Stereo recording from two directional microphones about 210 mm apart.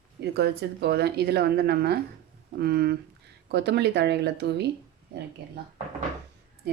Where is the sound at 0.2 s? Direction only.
50° right (ahead or behind).